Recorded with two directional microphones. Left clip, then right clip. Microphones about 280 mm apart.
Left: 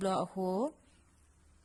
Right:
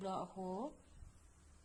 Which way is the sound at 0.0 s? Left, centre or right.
Left.